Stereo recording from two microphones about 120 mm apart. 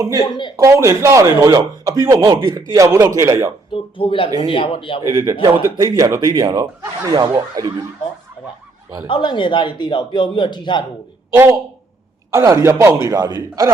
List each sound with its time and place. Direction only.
0.3 s a man's voice: 40° left (ahead or behind)
0.5 s speech: 25° right (ahead or behind)
2.4 s speech: 40° right (ahead or behind)
2.7 s speech: 25° right (ahead or behind)
3.7 s speech: 45° left (ahead or behind)
5.1 s speech: 25° right (ahead or behind)
9.0 s a man's voice: 40° left (ahead or behind)
11.3 s speech: 20° right (ahead or behind)